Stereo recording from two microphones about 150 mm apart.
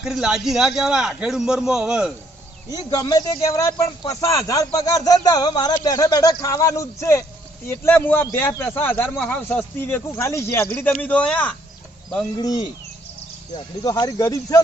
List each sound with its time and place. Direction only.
0.0 s a man's voice: 5° right (ahead or behind)
2.6 s a man's voice: 25° left (ahead or behind); by 11.5 s 10° left (ahead or behind)
12.4 s speech: 25° left (ahead or behind)
13.8 s speech: 25° left (ahead or behind)